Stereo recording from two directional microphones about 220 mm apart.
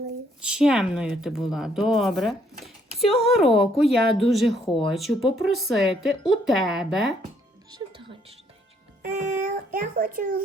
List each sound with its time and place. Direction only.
0.4 s speech: 5° right (ahead or behind)
4.7 s speech: 20° left (ahead or behind)
4.9 s speech: centre (ahead or behind)
7.7 s music: 25° right (ahead or behind)
9.0 s a child's voice: 40° right (ahead or behind)